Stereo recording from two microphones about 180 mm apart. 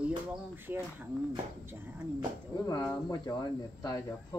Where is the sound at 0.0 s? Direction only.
10° right (ahead or behind).